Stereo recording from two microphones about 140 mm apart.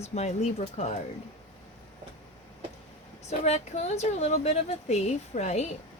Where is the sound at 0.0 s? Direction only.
50° left (ahead or behind).